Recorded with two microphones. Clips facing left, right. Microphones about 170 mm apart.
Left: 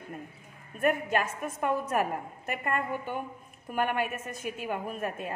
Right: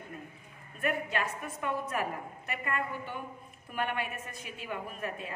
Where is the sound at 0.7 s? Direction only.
45° left (ahead or behind).